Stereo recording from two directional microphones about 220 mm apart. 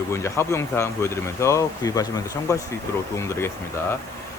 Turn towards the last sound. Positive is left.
turn(degrees=10)  # may be behind; listen again after turning